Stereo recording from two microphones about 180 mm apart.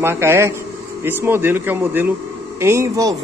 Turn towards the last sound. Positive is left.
turn(degrees=-15)  # may be behind; listen again after turning